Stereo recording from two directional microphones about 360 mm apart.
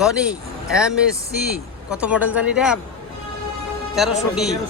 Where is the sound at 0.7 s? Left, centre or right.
Centre.